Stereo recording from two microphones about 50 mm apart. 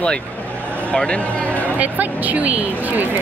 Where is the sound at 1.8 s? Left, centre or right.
Right.